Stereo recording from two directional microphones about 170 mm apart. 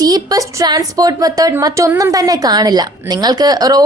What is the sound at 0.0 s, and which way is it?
A woman's voice, 20° right (ahead or behind).